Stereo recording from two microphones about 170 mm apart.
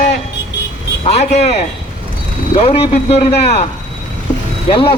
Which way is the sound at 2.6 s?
35° left (ahead or behind).